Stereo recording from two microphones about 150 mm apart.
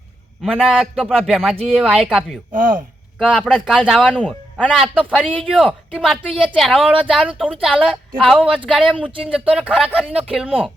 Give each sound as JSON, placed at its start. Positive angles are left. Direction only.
{"t": 0.4, "sound": "speech", "side_deg": 0}
{"t": 2.5, "sound": "chopping", "side_deg": -65}
{"t": 3.2, "sound": "speech", "side_deg": 5}
{"t": 4.7, "sound": "speech", "side_deg": -5}
{"t": 5.1, "sound": "speech", "side_deg": 5}
{"t": 8.9, "sound": "speech", "side_deg": 10}
{"t": 9.4, "sound": "speech", "side_deg": -5}